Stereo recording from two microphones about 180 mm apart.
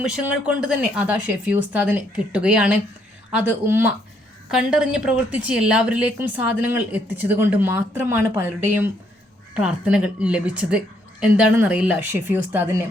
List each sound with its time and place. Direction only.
0.0 s a woman's voice: 5° right (ahead or behind)